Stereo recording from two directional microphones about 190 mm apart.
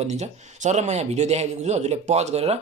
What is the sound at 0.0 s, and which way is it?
Speech, 35° right (ahead or behind).